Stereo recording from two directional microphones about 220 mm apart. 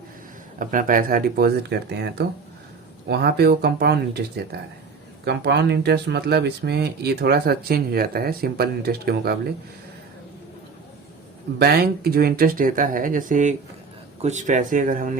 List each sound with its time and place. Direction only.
0.6 s speech: 35° right (ahead or behind)
3.1 s speech: 45° right (ahead or behind)
11.6 s speech: 45° right (ahead or behind)